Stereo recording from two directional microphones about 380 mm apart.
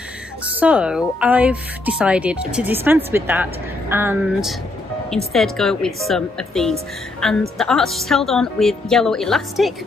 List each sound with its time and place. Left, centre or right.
0.6 s speech: centre